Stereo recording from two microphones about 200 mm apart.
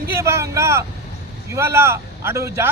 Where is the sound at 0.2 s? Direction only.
15° right (ahead or behind).